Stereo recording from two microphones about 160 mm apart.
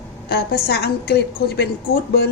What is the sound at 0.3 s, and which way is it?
A woman's voice, 75° left (ahead or behind).